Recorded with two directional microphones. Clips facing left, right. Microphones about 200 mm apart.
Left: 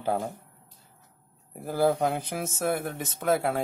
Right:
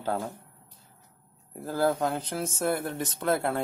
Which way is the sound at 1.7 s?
15° left (ahead or behind).